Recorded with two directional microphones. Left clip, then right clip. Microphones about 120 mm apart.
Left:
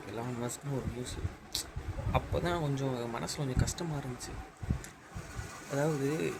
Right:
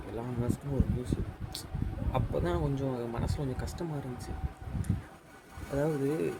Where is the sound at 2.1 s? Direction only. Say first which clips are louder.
Even; 15° right (ahead or behind).